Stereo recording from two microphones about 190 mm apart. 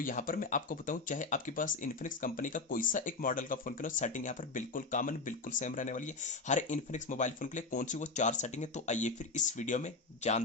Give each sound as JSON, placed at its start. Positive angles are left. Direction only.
{"t": 0.0, "sound": "speech", "side_deg": 45}